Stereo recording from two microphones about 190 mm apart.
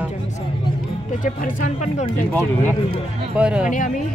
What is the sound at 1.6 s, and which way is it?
Speech, 40° left (ahead or behind).